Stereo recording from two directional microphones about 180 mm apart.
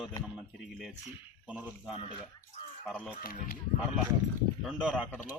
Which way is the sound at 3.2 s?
55° left (ahead or behind).